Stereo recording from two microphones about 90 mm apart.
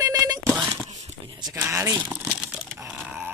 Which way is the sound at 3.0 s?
5° right (ahead or behind).